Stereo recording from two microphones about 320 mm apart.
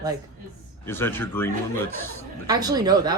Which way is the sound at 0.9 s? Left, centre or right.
Centre.